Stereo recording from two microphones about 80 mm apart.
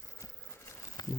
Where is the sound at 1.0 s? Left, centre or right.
Left.